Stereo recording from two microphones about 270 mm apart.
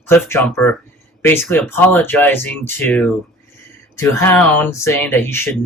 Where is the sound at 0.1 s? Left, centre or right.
Centre.